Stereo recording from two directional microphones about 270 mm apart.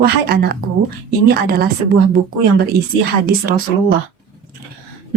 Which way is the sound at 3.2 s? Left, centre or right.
Right.